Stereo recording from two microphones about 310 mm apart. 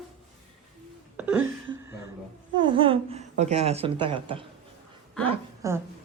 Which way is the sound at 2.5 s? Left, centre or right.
Centre.